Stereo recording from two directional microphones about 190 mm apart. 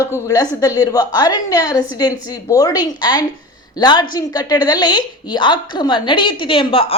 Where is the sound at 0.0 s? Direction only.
15° left (ahead or behind).